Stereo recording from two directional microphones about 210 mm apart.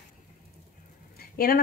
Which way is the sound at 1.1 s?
45° left (ahead or behind).